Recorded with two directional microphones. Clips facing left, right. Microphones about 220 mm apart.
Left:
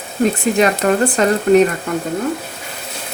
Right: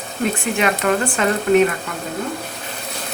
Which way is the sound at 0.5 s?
35° left (ahead or behind).